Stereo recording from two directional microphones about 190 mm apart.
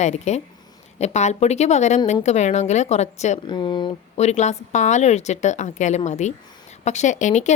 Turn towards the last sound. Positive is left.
turn(degrees=40)  # may be behind; listen again after turning